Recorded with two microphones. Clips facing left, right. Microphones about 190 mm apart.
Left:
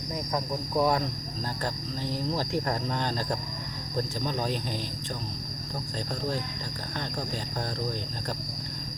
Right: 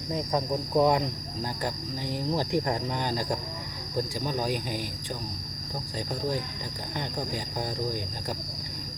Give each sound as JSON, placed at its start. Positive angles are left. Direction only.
{"t": 0.1, "sound": "speech", "side_deg": -20}
{"t": 1.6, "sound": "cricket", "side_deg": -15}